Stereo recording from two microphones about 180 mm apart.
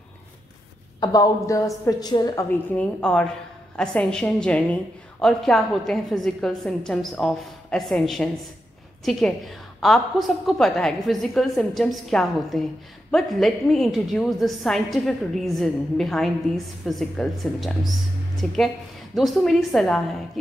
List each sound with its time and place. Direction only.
1.0 s a woman's voice: 20° left (ahead or behind)
2.7 s a woman's voice: 5° left (ahead or behind)